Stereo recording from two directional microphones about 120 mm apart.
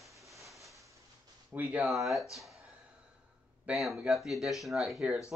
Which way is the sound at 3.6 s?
Centre (ahead or behind).